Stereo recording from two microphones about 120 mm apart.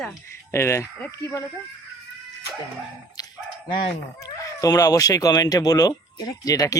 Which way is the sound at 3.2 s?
30° left (ahead or behind).